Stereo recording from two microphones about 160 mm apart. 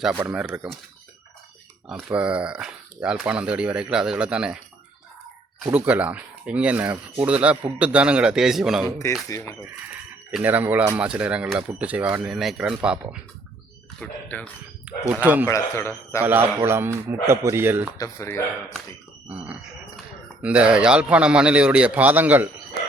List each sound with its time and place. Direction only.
0.2 s speech: 10° right (ahead or behind)
1.9 s speech: 5° right (ahead or behind)
5.6 s speech: 10° right (ahead or behind)
9.3 s speech: 20° left (ahead or behind)
10.3 s speech: 10° right (ahead or behind)
14.0 s a man's voice: 10° left (ahead or behind)
14.9 s speech: 10° right (ahead or behind)
15.4 s a man's voice: 15° left (ahead or behind)
16.2 s speech: 10° right (ahead or behind)
17.9 s a man's voice: 20° left (ahead or behind)
20.4 s speech: 5° right (ahead or behind)